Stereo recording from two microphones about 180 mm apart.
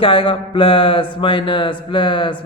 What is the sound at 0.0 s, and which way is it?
A man's voice, 30° left (ahead or behind).